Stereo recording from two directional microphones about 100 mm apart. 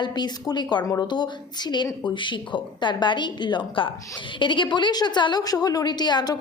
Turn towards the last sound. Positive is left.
turn(degrees=45)  # may be behind; listen again after turning